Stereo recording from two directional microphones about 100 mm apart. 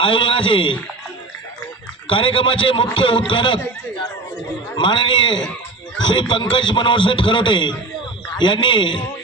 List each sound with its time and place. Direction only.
0.0 s a man's voice: 60° left (ahead or behind)
2.0 s a man's voice: 60° left (ahead or behind)
4.8 s a man's voice: 50° left (ahead or behind)